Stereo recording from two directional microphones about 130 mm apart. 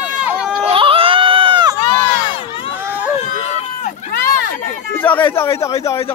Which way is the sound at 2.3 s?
45° left (ahead or behind).